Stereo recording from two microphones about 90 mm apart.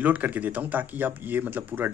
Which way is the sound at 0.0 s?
20° right (ahead or behind).